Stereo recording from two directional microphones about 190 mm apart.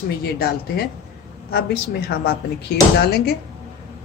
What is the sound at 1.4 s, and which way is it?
Speech, 55° left (ahead or behind).